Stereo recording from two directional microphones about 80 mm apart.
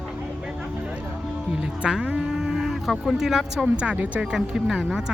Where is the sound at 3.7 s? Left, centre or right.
Centre.